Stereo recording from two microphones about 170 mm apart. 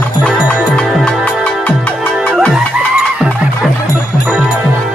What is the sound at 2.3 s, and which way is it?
Music, centre (ahead or behind).